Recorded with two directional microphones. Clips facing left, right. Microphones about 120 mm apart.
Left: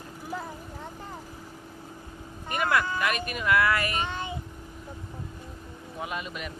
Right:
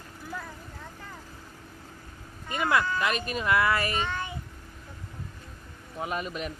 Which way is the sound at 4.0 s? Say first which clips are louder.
Even; 15° left (ahead or behind).